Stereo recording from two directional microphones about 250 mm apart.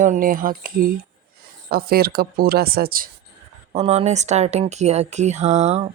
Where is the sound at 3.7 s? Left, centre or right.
Right.